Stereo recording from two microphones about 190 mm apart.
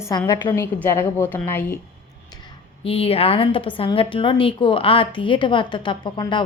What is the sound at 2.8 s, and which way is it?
A woman's voice, 30° left (ahead or behind).